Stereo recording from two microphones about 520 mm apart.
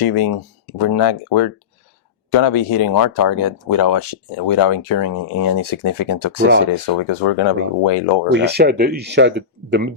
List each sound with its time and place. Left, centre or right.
0.0 s speech: left
8.3 s speech: centre